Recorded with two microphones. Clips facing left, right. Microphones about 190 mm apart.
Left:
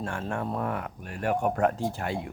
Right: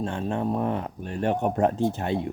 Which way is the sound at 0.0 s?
20° right (ahead or behind).